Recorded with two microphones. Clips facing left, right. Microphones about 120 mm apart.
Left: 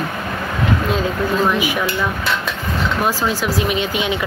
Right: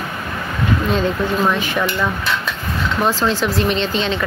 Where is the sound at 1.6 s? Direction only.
10° left (ahead or behind).